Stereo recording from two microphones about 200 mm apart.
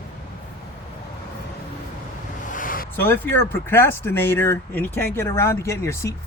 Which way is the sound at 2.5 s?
45° left (ahead or behind).